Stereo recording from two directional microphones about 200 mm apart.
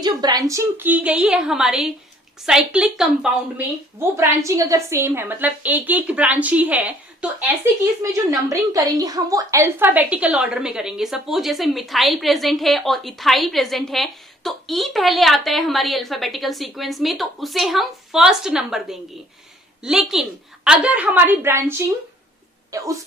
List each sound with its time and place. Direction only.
0.0 s a woman's voice: 20° right (ahead or behind); by 3.3 s 5° right (ahead or behind)
4.2 s a woman's voice: 15° right (ahead or behind)